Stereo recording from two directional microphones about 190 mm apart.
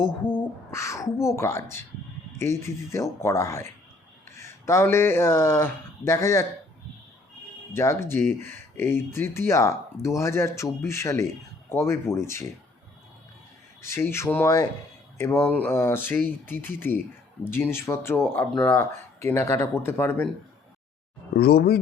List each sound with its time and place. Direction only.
0.2 s a sound: 10° left (ahead or behind)
1.4 s speech: 15° left (ahead or behind)
7.7 s speech: 15° left (ahead or behind)
13.8 s speech: 15° left (ahead or behind)
21.3 s speech: 55° left (ahead or behind)